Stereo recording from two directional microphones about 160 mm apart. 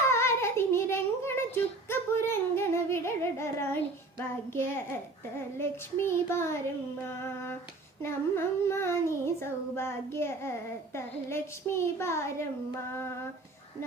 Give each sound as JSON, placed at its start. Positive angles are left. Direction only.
{"t": 0.0, "sound": "child singing", "side_deg": 15}